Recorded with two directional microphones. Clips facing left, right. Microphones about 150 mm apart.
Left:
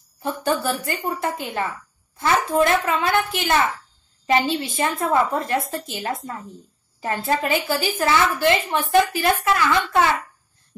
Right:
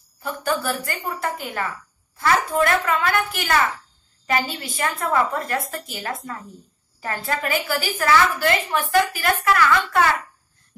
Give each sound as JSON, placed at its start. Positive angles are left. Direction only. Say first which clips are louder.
{"t": 0.2, "sound": "a woman's voice", "louder": "left 2 dB", "side_deg": 20}